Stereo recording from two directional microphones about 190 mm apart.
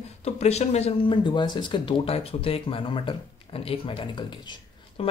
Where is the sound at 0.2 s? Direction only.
35° left (ahead or behind).